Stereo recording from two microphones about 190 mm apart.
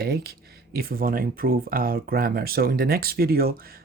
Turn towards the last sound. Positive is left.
turn(degrees=-50)  # may be behind; listen again after turning